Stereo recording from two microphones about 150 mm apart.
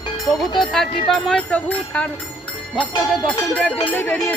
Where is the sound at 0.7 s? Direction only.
Centre (ahead or behind).